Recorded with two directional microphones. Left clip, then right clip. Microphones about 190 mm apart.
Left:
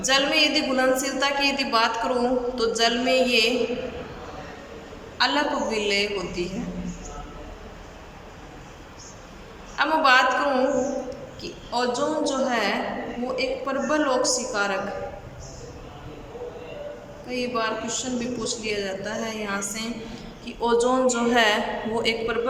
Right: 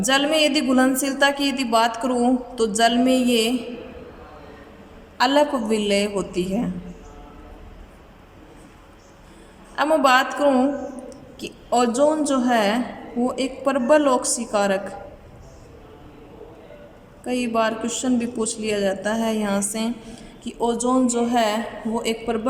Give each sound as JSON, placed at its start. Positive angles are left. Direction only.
{"t": 0.0, "sound": "a woman's voice", "side_deg": -40}
{"t": 5.1, "sound": "a woman's voice", "side_deg": -35}
{"t": 9.7, "sound": "a woman's voice", "side_deg": -35}
{"t": 17.2, "sound": "a woman's voice", "side_deg": -40}